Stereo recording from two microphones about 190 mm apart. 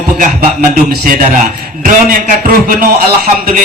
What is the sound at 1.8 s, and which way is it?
A man's voice, 45° right (ahead or behind).